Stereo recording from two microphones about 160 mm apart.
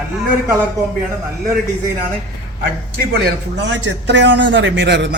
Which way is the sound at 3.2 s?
90° right.